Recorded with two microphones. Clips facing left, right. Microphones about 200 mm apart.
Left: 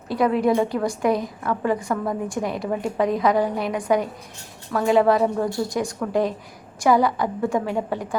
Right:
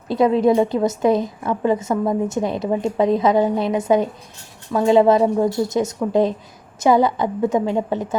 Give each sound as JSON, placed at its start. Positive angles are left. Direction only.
{"t": 0.1, "sound": "a woman's voice", "side_deg": -25}